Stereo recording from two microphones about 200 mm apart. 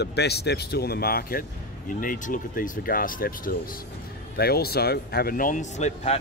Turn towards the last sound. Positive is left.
turn(degrees=35)  # may be behind; listen again after turning